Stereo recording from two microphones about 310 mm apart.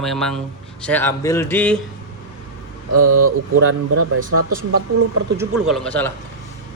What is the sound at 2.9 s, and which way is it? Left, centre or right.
Speech, right.